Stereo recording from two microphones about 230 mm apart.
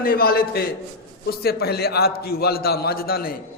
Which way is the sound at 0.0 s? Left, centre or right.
Left.